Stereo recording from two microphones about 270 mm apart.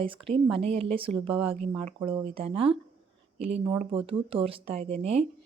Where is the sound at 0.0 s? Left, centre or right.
Centre.